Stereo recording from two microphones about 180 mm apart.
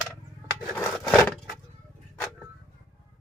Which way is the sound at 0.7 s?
10° left (ahead or behind).